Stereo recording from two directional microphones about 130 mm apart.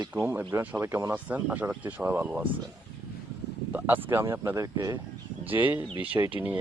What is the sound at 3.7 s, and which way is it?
Speech, 15° right (ahead or behind).